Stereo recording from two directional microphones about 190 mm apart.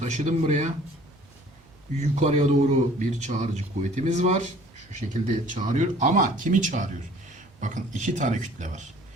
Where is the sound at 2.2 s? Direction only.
35° right (ahead or behind).